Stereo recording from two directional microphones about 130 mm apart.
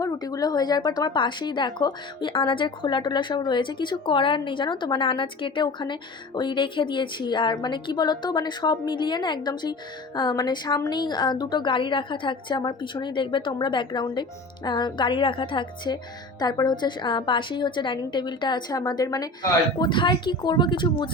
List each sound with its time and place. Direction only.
0.0 s a woman's voice: 30° left (ahead or behind)